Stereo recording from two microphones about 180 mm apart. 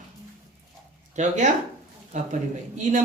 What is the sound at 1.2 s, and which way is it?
Speech, 45° right (ahead or behind).